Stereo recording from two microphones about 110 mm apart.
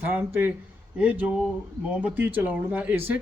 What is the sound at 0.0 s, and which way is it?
A man's voice, 15° right (ahead or behind).